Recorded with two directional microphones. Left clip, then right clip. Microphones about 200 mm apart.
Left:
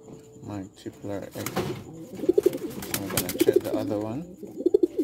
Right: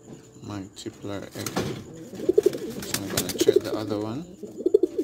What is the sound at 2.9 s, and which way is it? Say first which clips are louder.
Bird: right 1 dB; 40° left (ahead or behind).